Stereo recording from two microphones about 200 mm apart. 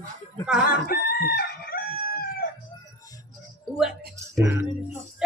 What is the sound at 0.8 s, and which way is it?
Chicken, 50° left (ahead or behind).